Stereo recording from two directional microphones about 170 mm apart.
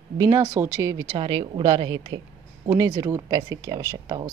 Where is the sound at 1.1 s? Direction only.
30° right (ahead or behind).